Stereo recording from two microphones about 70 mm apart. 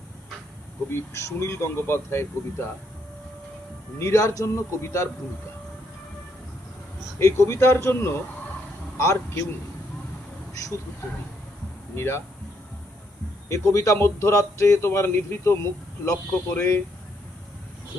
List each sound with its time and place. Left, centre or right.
0.9 s a man's voice: left
3.9 s a man's voice: left
7.2 s a man's voice: left
10.5 s speech: left
11.9 s a man's voice: left
13.5 s a man's voice: left
16.6 s a man's voice: left